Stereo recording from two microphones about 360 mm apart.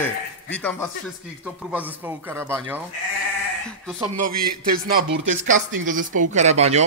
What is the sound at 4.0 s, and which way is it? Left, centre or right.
Speech, right.